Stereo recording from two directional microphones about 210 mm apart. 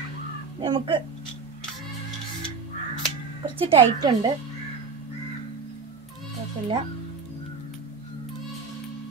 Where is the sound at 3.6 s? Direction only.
20° right (ahead or behind).